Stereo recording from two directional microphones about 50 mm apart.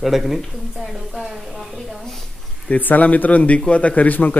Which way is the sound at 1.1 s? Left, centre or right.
Centre.